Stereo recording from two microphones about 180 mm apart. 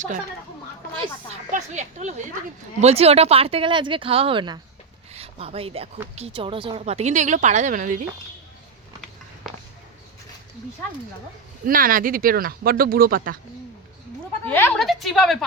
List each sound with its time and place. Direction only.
1.5 s a woman's voice: 40° right (ahead or behind)
9.0 s a sound: centre (ahead or behind)
11.6 s speech: 50° right (ahead or behind)
14.4 s a woman's voice: 10° left (ahead or behind)